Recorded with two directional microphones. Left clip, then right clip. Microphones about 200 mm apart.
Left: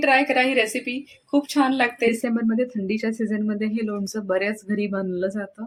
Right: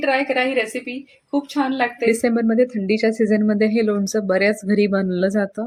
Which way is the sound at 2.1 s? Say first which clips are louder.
Right 6 dB; 20° right (ahead or behind).